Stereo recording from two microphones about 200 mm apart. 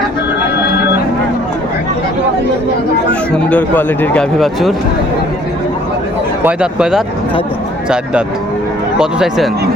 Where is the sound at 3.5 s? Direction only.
10° left (ahead or behind).